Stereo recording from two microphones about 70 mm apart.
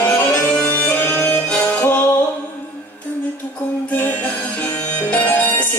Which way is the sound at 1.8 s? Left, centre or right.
Left.